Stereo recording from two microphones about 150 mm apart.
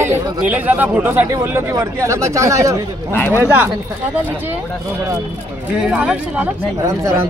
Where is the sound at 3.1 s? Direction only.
15° left (ahead or behind).